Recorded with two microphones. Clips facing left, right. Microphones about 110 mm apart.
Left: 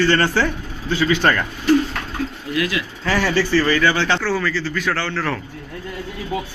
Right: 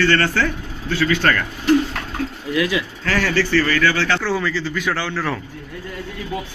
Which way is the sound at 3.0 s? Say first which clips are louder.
Left 2 dB; 15° left (ahead or behind).